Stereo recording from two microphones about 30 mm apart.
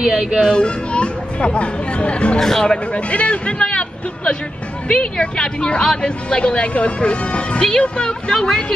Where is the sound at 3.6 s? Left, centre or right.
Left.